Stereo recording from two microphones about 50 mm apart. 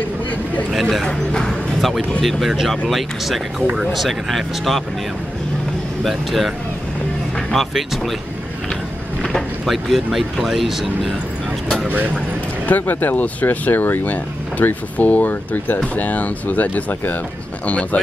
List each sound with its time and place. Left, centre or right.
0.7 s speech: centre
1.0 s speech: centre
2.4 s speech: centre
6.0 s speech: centre
9.7 s speech: centre
12.6 s speech: left